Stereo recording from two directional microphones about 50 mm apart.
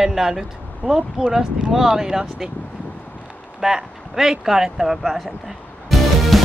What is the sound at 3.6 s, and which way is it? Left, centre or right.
Speech, centre.